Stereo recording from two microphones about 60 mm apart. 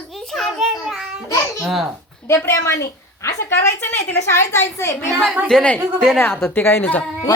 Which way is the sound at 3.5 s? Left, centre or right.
Left.